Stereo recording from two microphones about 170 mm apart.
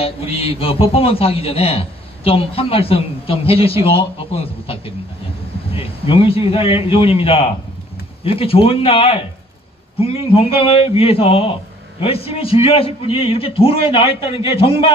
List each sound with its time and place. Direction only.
0.0 s a man's voice: 35° left (ahead or behind)